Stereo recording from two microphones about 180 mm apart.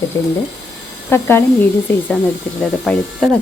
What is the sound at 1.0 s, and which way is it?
Speech, 15° left (ahead or behind).